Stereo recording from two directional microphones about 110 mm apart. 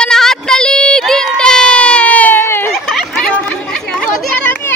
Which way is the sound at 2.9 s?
5° left (ahead or behind).